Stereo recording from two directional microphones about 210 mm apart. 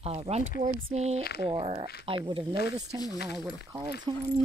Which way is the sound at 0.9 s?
30° right (ahead or behind).